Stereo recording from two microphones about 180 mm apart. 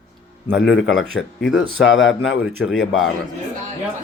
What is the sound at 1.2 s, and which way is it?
Speech, 90° left.